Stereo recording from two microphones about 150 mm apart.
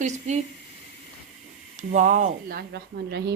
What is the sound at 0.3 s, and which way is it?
Speech, 50° right (ahead or behind).